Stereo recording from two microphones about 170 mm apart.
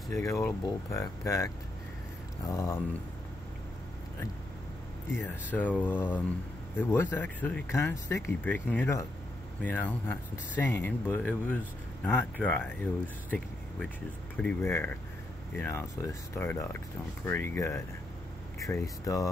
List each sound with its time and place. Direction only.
0.1 s speech: 15° left (ahead or behind)
5.1 s speech: 15° left (ahead or behind)
14.3 s speech: 5° left (ahead or behind)